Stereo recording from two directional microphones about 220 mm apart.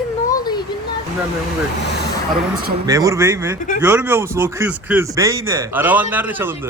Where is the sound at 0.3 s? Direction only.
15° left (ahead or behind).